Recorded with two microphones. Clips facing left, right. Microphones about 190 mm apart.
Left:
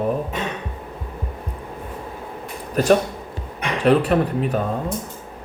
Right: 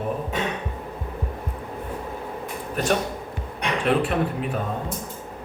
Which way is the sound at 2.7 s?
40° left (ahead or behind).